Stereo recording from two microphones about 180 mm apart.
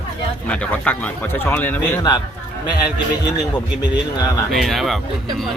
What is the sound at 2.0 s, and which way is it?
Speech, 20° left (ahead or behind).